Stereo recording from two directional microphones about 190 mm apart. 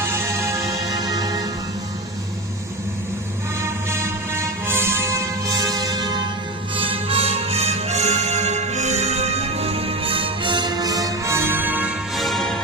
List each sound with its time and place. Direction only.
0.0 s music: 15° right (ahead or behind)
3.6 s music: 15° right (ahead or behind)